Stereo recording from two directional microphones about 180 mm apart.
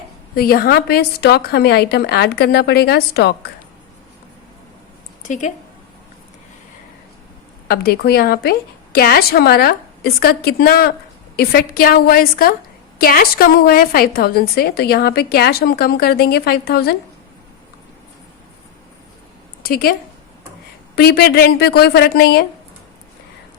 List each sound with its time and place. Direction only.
0.3 s a woman's voice: 55° left (ahead or behind)
7.7 s a woman's voice: 60° left (ahead or behind)
19.6 s a woman's voice: 55° left (ahead or behind)